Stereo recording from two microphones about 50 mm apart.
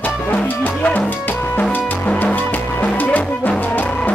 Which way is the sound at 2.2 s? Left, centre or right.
Left.